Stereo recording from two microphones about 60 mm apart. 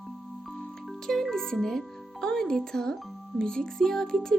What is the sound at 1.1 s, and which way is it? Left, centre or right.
A child's voice, centre.